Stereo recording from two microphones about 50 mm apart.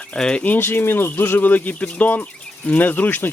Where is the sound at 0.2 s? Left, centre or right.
Centre.